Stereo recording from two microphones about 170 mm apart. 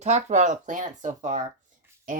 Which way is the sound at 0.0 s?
45° right (ahead or behind).